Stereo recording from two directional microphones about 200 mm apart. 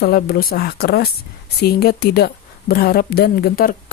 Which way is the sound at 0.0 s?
50° left (ahead or behind).